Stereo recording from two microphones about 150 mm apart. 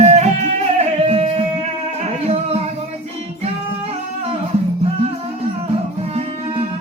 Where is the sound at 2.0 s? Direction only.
40° right (ahead or behind).